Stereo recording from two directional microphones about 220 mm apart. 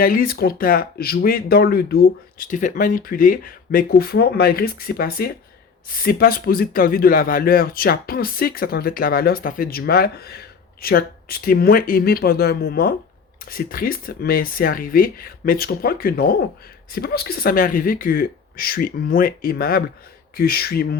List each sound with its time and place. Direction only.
0.0 s speech: 40° left (ahead or behind)